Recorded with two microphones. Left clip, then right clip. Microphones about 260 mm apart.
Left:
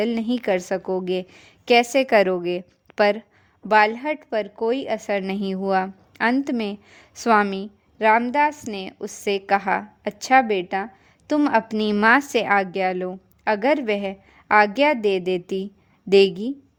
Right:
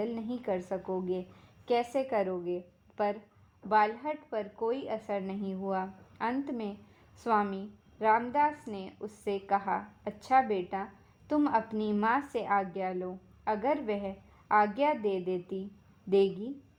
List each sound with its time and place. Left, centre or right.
0.0 s a woman's voice: left